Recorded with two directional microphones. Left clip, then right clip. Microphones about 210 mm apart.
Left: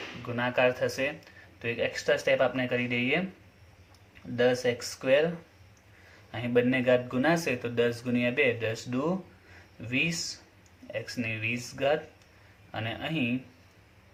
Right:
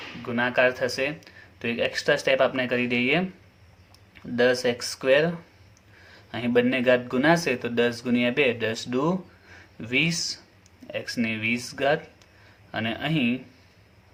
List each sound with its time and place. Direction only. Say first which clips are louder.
0.3 s speech: right 4 dB; 35° right (ahead or behind)
4.4 s speech: right 4 dB; 40° right (ahead or behind)
6.3 s speech: right 3 dB; 35° right (ahead or behind)